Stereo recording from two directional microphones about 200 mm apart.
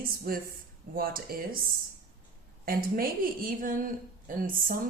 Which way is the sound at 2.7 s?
45° right (ahead or behind).